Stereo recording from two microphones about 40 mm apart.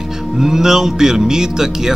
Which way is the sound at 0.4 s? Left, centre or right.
Centre.